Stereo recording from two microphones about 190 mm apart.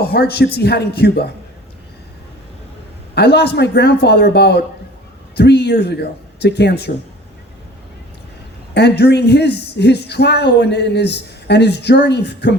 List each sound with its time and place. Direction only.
0.0 s a woman's voice: 55° left (ahead or behind)
3.2 s a woman's voice: 60° left (ahead or behind)
8.7 s a woman's voice: 60° left (ahead or behind)